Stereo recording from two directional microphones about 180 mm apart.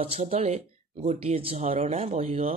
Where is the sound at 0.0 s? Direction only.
35° right (ahead or behind).